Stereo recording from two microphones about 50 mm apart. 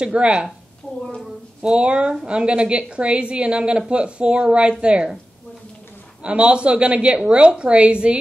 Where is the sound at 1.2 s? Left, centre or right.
Centre.